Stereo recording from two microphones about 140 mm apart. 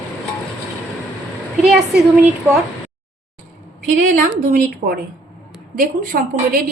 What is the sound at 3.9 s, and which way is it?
A woman's voice, 60° right (ahead or behind).